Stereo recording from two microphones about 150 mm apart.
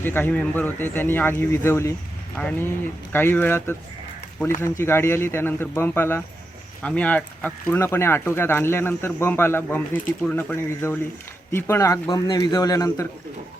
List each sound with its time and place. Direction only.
0.0 s a man's voice: 15° left (ahead or behind)